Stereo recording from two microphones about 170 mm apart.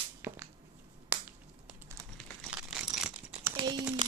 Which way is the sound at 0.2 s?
10° right (ahead or behind).